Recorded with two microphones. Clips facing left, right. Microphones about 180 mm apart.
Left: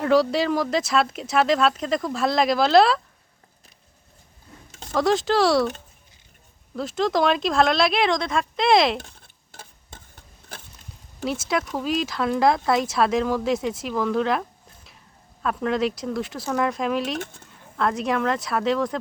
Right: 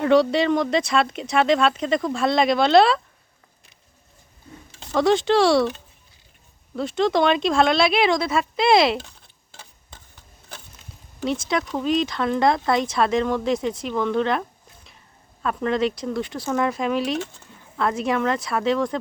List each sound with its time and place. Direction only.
0.0 s speech: centre (ahead or behind)
4.9 s speech: centre (ahead or behind)
6.7 s speech: centre (ahead or behind)
9.0 s a sound: 50° left (ahead or behind)
11.2 s speech: 5° left (ahead or behind)